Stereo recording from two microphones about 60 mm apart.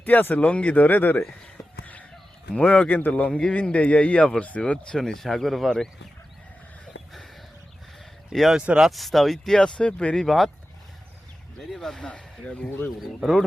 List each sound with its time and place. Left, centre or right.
0.0 s speech: left
2.6 s speech: left
3.2 s speech: centre
8.3 s speech: centre
8.5 s speech: centre
8.9 s speech: centre
10.2 s speech: centre
11.7 s speech: centre
13.0 s speech: centre